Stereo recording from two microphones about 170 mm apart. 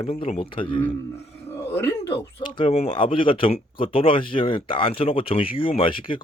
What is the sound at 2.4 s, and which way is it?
Speech, 30° left (ahead or behind).